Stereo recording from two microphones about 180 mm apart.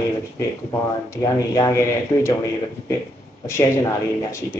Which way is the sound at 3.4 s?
15° left (ahead or behind).